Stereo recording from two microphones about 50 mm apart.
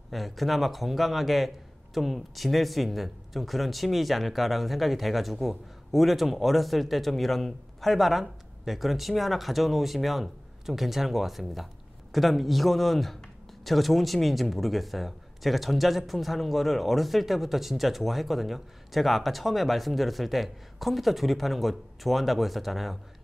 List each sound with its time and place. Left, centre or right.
0.1 s speech: centre